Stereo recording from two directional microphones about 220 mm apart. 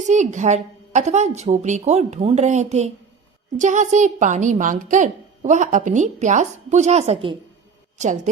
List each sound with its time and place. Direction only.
0.0 s a woman's voice: 35° right (ahead or behind)